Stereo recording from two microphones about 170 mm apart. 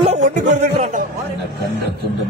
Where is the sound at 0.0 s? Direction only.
40° right (ahead or behind).